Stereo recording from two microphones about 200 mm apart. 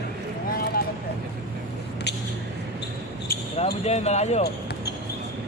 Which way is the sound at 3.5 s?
30° left (ahead or behind).